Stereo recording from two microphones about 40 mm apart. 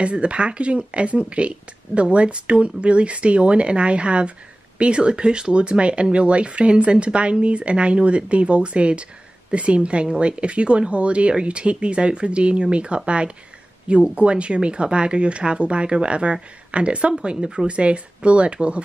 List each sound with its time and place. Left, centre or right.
0.0 s speech: right